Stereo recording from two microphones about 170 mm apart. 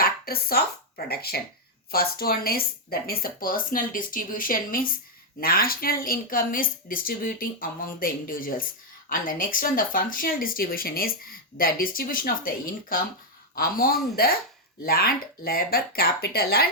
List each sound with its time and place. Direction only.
0.0 s a woman's voice: 60° left (ahead or behind)